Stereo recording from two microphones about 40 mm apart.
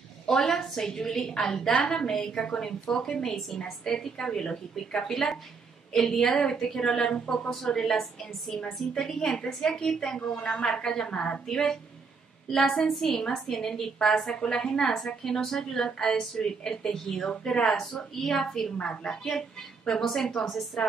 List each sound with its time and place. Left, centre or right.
0.4 s a woman's voice: centre
9.4 s a woman's voice: left
11.1 s a woman's voice: left
11.4 s a woman's voice: centre
18.8 s a woman's voice: left
20.0 s a woman's voice: centre